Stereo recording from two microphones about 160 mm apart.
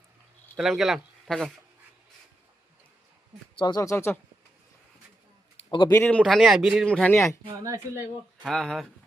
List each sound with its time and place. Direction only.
0.5 s speech: centre (ahead or behind)
3.6 s speech: 25° left (ahead or behind)
5.7 s speech: 30° left (ahead or behind)
6.0 s a man's voice: 10° left (ahead or behind)
7.6 s speech: 20° right (ahead or behind)
8.4 s a man's voice: centre (ahead or behind)